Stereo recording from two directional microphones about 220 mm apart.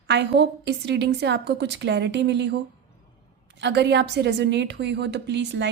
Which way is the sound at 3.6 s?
50° right (ahead or behind).